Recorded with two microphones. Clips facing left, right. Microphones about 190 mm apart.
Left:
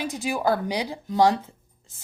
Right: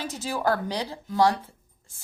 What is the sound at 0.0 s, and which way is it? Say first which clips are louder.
Speech: left 2 dB; 15° left (ahead or behind).